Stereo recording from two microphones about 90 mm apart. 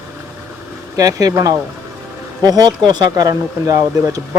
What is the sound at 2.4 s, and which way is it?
Speech, 45° right (ahead or behind).